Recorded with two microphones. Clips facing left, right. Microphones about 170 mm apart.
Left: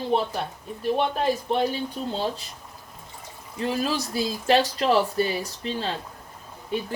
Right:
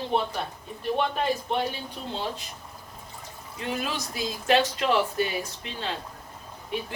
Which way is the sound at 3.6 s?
35° left (ahead or behind).